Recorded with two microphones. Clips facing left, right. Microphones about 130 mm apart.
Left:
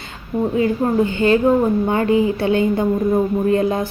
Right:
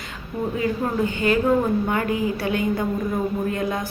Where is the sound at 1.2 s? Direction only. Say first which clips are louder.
Left 4 dB; 30° left (ahead or behind).